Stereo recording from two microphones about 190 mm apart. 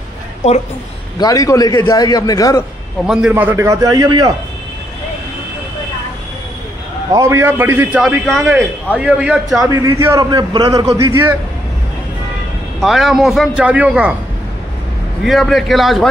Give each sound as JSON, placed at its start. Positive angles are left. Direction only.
{"t": 1.2, "sound": "a man's voice", "side_deg": 15}
{"t": 3.1, "sound": "a man's voice", "side_deg": -5}
{"t": 7.1, "sound": "a man's voice", "side_deg": -15}
{"t": 9.7, "sound": "a man's voice", "side_deg": -15}
{"t": 12.8, "sound": "a man's voice", "side_deg": 0}
{"t": 15.2, "sound": "a man's voice", "side_deg": 0}